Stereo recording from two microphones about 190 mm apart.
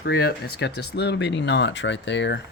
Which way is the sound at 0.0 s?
55° left (ahead or behind).